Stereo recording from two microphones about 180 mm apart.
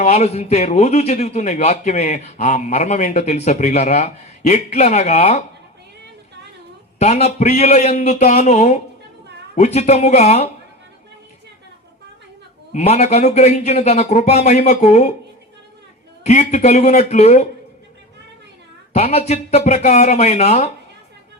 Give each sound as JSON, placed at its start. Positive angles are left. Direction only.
{"t": 0.0, "sound": "a man's voice", "side_deg": 40}
{"t": 7.0, "sound": "a man's voice", "side_deg": 35}
{"t": 12.7, "sound": "a man's voice", "side_deg": 35}
{"t": 16.2, "sound": "a man's voice", "side_deg": 40}
{"t": 18.9, "sound": "a man's voice", "side_deg": 35}